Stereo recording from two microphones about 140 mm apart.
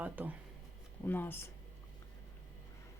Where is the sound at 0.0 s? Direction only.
10° right (ahead or behind).